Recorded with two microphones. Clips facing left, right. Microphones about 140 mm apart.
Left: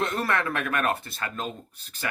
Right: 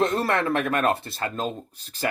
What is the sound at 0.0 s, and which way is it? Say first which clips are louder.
Speech: right 4 dB; 30° right (ahead or behind).